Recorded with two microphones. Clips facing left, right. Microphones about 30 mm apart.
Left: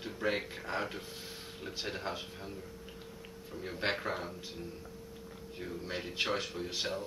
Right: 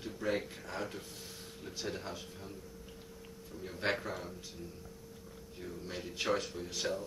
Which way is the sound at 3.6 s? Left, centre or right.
Left.